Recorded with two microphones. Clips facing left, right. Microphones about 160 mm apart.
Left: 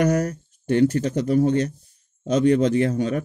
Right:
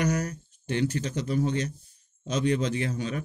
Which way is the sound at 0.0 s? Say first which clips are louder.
Left 7 dB; 50° left (ahead or behind).